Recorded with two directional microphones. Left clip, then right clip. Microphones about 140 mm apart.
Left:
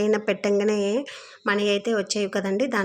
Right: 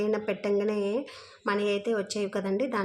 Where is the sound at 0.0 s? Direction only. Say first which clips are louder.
Left 6 dB; 35° left (ahead or behind).